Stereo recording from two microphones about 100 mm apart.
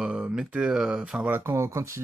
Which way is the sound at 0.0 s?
10° right (ahead or behind).